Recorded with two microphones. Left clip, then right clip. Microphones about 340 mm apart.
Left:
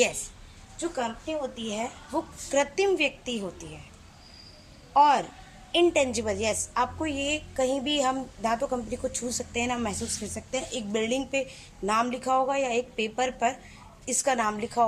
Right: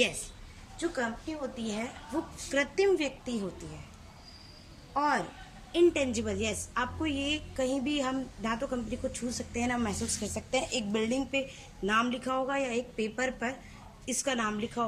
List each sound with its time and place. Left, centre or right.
0.8 s a woman's voice: centre
4.9 s a woman's voice: centre